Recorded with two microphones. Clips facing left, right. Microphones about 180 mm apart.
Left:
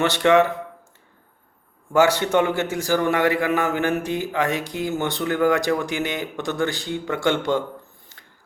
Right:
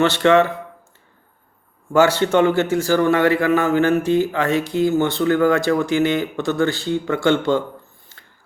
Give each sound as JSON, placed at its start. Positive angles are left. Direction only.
{"t": 0.0, "sound": "a man's voice", "side_deg": 15}
{"t": 1.9, "sound": "a man's voice", "side_deg": 15}
{"t": 8.1, "sound": "a sound", "side_deg": 15}